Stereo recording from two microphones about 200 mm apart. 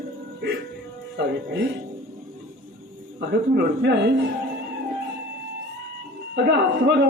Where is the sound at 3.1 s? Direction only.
55° right (ahead or behind).